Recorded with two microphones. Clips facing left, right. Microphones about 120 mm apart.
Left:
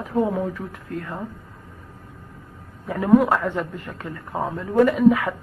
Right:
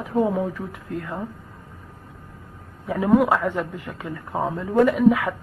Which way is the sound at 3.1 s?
5° right (ahead or behind).